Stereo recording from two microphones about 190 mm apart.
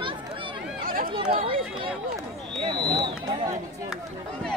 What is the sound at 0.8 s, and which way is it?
Chatter, 50° right (ahead or behind).